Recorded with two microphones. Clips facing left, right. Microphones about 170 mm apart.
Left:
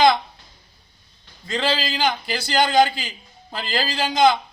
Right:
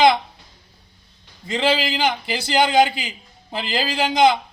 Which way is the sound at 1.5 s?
15° right (ahead or behind).